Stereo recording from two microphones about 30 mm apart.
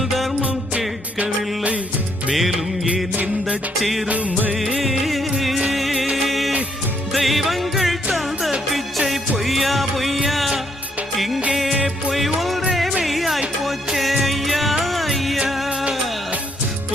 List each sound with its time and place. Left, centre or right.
1.2 s music: right
3.8 s music: centre
4.1 s music: right
4.8 s music: centre
12.1 s music: centre